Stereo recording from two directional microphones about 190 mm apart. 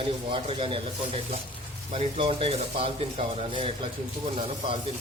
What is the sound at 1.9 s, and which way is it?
Speech, 30° right (ahead or behind).